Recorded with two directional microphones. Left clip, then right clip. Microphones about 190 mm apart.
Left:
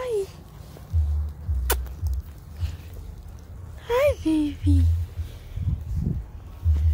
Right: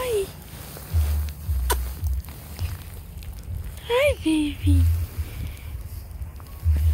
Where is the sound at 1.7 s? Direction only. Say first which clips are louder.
Right 2 dB; 30° left (ahead or behind).